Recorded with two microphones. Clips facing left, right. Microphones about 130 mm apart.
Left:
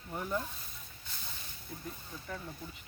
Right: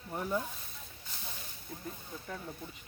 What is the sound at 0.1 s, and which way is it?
Speech, 10° right (ahead or behind).